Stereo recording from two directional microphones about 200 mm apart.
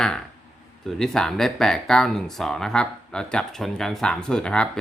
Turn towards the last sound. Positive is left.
turn(degrees=5)  # may be behind; listen again after turning